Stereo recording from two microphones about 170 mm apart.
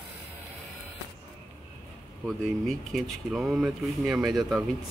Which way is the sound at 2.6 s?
Centre (ahead or behind).